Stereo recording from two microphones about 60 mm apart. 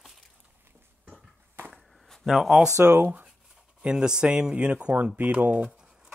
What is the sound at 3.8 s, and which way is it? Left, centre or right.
Speech, centre.